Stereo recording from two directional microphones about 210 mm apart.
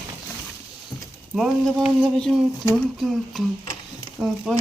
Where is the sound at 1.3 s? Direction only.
Centre (ahead or behind).